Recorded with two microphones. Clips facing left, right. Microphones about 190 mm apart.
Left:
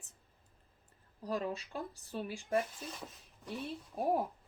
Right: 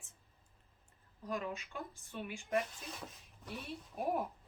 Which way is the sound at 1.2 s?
35° left (ahead or behind).